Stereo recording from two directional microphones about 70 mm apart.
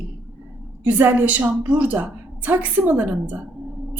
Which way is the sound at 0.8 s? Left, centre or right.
Right.